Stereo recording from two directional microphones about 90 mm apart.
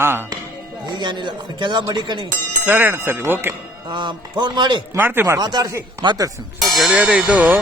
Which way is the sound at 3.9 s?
60° right (ahead or behind).